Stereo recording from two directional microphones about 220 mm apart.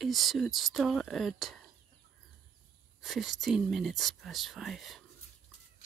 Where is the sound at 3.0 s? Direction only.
Centre (ahead or behind).